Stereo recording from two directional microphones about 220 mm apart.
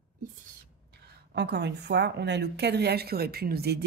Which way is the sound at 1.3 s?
50° right (ahead or behind).